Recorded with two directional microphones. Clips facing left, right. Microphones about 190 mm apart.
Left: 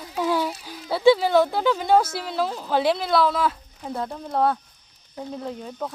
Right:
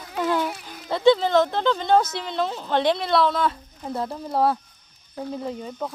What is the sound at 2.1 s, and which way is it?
A woman's voice, 5° left (ahead or behind).